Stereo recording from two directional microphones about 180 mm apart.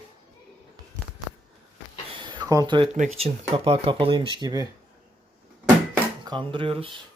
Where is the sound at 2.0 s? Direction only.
25° right (ahead or behind).